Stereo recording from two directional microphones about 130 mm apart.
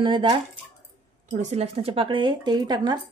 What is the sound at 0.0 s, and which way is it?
Speech, 35° right (ahead or behind).